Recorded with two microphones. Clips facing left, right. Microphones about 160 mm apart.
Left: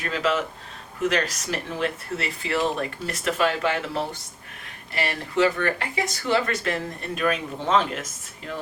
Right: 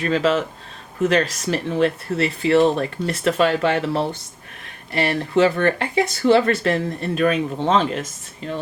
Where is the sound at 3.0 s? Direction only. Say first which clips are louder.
Right 8 dB; 5° left (ahead or behind).